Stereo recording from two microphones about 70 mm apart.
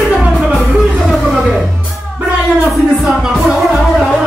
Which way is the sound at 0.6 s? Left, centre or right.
Centre.